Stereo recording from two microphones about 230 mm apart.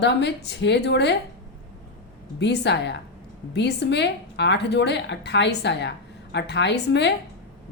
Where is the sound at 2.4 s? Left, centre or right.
Left.